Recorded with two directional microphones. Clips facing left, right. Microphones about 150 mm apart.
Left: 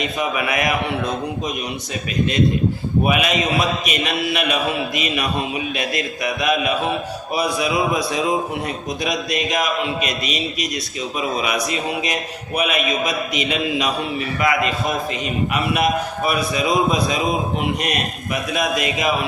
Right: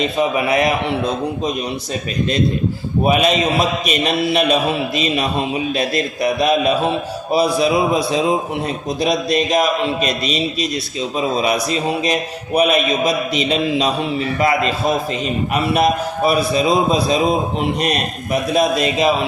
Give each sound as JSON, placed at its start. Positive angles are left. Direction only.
{"t": 0.0, "sound": "a man's voice", "side_deg": -30}
{"t": 3.0, "sound": "a man's voice", "side_deg": -30}
{"t": 18.5, "sound": "a man's voice", "side_deg": -30}